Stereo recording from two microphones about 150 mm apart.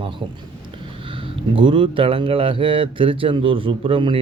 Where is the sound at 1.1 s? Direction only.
35° right (ahead or behind).